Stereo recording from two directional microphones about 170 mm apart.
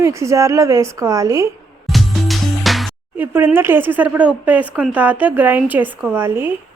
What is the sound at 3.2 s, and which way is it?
Speech, 10° right (ahead or behind).